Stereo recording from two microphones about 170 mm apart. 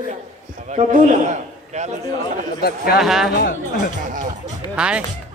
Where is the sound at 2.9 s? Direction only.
Centre (ahead or behind).